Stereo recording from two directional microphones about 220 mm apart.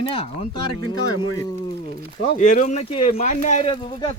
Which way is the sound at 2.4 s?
35° left (ahead or behind).